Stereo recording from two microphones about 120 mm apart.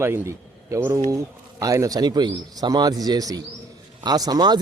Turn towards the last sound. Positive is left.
turn(degrees=-35)  # may be behind; listen again after turning